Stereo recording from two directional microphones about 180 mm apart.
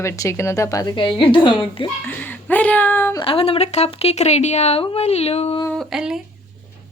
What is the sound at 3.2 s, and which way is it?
Speech, 30° left (ahead or behind).